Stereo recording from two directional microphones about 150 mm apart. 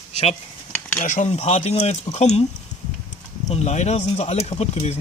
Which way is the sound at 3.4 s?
45° left (ahead or behind).